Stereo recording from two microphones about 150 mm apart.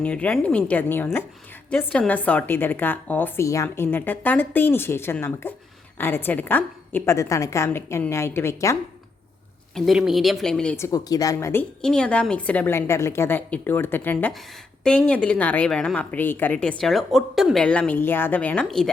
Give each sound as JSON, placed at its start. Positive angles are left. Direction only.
{"t": 0.0, "sound": "a woman's voice", "side_deg": 10}
{"t": 9.7, "sound": "speech", "side_deg": 0}
{"t": 10.8, "sound": "a woman's voice", "side_deg": 20}
{"t": 11.8, "sound": "a woman's voice", "side_deg": 5}